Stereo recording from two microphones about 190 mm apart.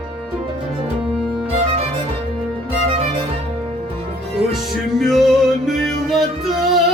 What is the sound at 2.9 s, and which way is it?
Music, 30° right (ahead or behind).